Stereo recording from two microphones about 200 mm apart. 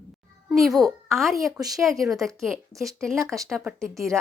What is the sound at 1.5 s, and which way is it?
Speech, 20° right (ahead or behind).